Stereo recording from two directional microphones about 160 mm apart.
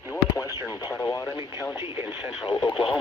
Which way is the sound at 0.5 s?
25° left (ahead or behind).